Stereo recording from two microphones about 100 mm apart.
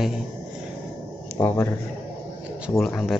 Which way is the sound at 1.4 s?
25° left (ahead or behind).